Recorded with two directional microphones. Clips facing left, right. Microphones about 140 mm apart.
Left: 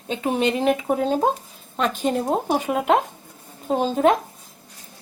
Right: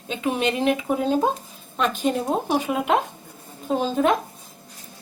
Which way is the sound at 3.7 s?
40° left (ahead or behind).